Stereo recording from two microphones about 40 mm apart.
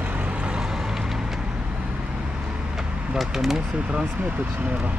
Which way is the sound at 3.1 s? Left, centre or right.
Centre.